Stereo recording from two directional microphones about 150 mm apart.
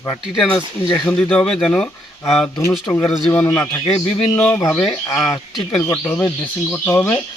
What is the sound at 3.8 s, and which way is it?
Speech, 40° left (ahead or behind).